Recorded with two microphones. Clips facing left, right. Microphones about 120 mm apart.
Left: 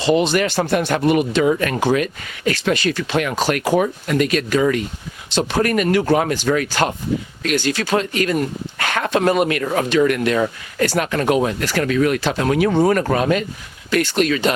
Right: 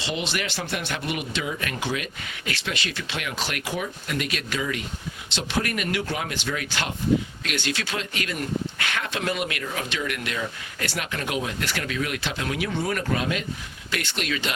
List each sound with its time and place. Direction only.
0.0 s speech: 45° left (ahead or behind)